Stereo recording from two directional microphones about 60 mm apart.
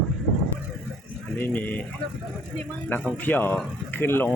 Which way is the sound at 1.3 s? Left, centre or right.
Left.